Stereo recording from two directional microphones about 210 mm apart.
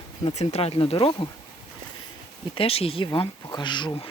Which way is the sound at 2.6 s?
30° left (ahead or behind).